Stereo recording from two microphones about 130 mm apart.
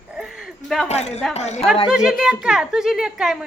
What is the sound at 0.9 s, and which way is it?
Speech, 55° left (ahead or behind).